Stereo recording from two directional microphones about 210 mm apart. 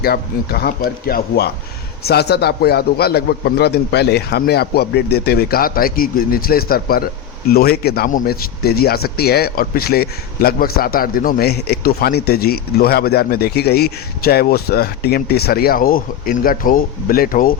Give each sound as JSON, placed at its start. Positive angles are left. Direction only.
{"t": 0.0, "sound": "speech", "side_deg": 45}